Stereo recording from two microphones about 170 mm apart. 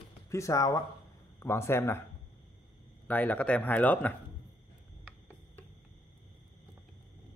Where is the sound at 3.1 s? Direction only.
10° left (ahead or behind).